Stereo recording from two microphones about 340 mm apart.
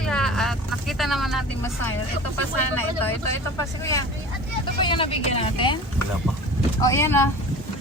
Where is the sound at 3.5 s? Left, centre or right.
Centre.